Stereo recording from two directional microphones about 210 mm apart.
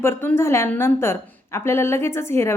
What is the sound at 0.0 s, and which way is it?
A woman's voice, 10° left (ahead or behind).